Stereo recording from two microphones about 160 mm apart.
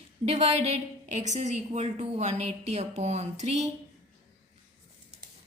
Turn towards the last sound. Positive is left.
turn(degrees=-45)  # may be behind; listen again after turning